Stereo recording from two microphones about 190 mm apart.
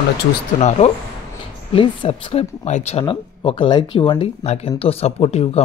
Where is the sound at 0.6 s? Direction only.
35° left (ahead or behind).